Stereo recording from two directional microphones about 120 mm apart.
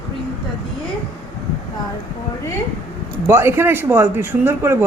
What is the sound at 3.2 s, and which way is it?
Speech, 20° right (ahead or behind).